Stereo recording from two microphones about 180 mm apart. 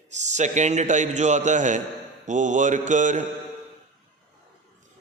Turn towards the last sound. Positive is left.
turn(degrees=-45)  # may be behind; listen again after turning